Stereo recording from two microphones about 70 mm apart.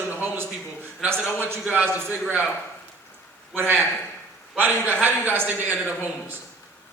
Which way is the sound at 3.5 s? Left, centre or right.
Right.